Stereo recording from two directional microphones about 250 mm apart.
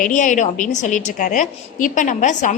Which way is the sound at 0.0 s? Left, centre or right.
Left.